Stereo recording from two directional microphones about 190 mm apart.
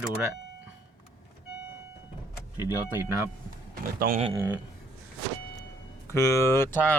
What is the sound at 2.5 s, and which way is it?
Speech, 15° right (ahead or behind).